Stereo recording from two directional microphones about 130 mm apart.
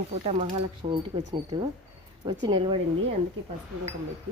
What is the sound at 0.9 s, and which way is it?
Speech, 40° right (ahead or behind).